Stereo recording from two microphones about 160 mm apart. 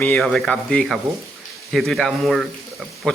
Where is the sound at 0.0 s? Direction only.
5° left (ahead or behind).